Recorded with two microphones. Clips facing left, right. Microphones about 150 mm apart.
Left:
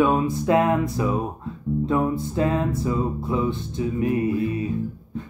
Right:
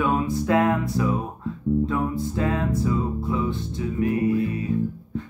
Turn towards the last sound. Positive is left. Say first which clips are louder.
# even
turn(degrees=20)  # may be behind; listen again after turning